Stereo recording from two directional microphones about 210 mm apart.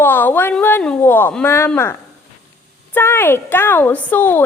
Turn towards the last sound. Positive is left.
turn(degrees=10)  # may be behind; listen again after turning